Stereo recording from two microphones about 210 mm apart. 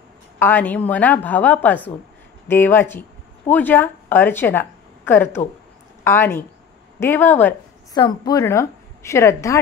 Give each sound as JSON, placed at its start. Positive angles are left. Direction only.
{"t": 0.4, "sound": "a woman's voice", "side_deg": 10}